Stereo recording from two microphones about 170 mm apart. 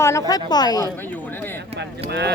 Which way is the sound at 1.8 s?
85° right.